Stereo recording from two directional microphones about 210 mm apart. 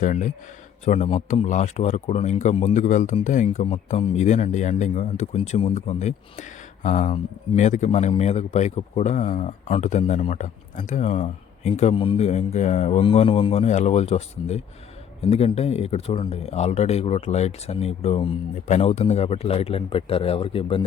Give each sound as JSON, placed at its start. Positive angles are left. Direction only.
{"t": 0.0, "sound": "a man's voice", "side_deg": 35}